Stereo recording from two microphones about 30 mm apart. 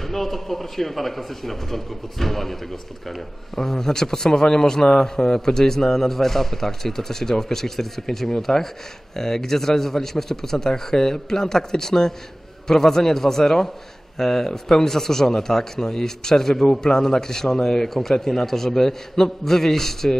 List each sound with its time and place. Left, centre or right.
0.0 s a man's voice: centre
3.5 s a man's voice: centre
17.8 s a man's voice: centre